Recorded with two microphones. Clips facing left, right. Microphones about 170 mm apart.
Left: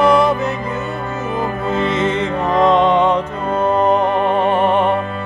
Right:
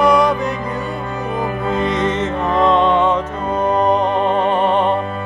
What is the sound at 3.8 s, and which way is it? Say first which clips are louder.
Music: even; 5° left (ahead or behind).